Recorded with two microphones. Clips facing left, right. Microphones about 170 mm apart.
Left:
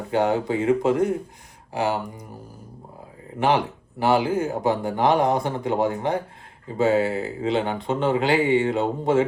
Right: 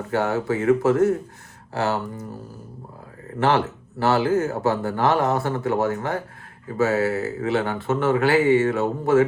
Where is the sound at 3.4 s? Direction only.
15° left (ahead or behind).